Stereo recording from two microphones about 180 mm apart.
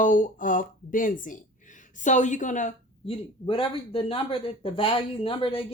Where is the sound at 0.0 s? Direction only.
45° left (ahead or behind).